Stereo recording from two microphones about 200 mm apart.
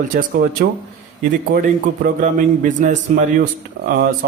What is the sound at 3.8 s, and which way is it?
Speech, 50° right (ahead or behind).